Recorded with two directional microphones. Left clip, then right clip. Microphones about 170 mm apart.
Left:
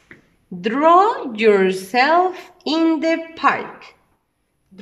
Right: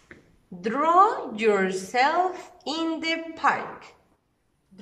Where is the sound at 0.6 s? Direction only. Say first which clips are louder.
Left 6 dB; 25° left (ahead or behind).